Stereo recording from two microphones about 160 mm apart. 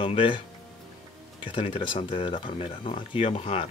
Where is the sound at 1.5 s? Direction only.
35° left (ahead or behind).